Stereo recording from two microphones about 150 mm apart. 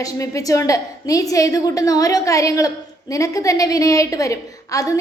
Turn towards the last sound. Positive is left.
turn(degrees=20)  # may be behind; listen again after turning